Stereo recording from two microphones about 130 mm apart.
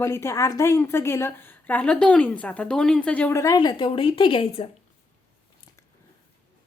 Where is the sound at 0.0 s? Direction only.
20° left (ahead or behind); by 4.7 s 45° left (ahead or behind).